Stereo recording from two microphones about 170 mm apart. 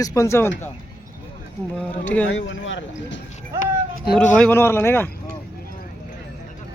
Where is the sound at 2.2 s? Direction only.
90° left.